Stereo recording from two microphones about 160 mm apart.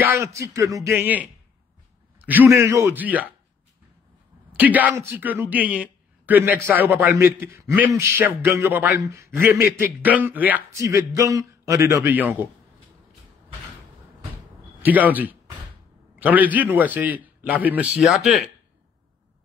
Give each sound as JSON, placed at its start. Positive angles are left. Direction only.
{"t": 0.0, "sound": "speech", "side_deg": -15}
{"t": 0.9, "sound": "a man's voice", "side_deg": -10}
{"t": 4.6, "sound": "a man's voice", "side_deg": -10}
{"t": 14.8, "sound": "a man's voice", "side_deg": -10}